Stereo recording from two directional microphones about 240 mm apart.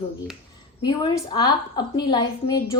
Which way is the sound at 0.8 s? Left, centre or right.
Centre.